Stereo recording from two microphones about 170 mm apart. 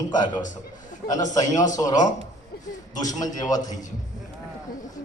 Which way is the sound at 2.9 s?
20° left (ahead or behind).